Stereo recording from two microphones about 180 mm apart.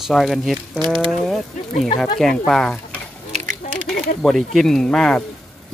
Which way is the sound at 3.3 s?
40° right (ahead or behind).